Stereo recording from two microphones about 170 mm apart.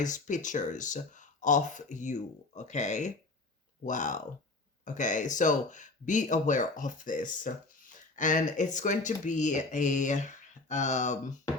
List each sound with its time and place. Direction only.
0.0 s speech: 45° left (ahead or behind)